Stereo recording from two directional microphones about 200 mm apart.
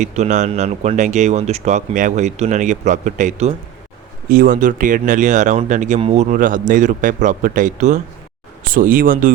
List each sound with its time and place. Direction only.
0.0 s a man's voice: 35° right (ahead or behind)